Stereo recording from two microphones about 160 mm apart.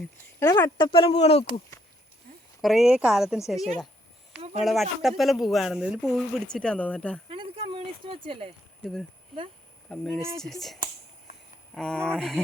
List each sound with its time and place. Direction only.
0.3 s speech: 25° left (ahead or behind); by 1.5 s 40° left (ahead or behind)
2.6 s speech: centre (ahead or behind)
7.3 s a sound: 35° right (ahead or behind)
8.8 s speech: 5° left (ahead or behind)